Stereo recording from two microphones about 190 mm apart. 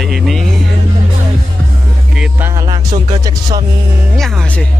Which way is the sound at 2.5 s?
20° right (ahead or behind).